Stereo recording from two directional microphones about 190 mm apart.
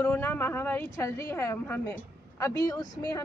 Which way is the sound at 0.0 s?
10° left (ahead or behind).